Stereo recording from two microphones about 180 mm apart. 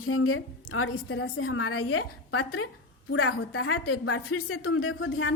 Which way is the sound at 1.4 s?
90° left.